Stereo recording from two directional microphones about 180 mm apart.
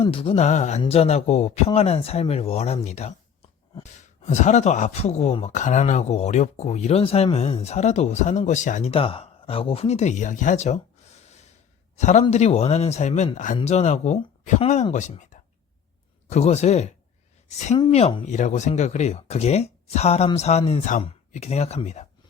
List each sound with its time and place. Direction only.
0.0 s speech: 30° left (ahead or behind)
11.9 s a man's voice: 40° left (ahead or behind)